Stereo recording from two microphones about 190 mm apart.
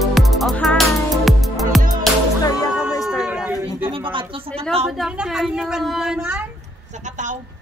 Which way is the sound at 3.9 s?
25° right (ahead or behind).